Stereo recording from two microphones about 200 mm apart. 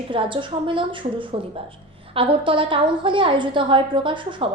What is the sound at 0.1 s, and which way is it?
A woman's voice, 25° right (ahead or behind).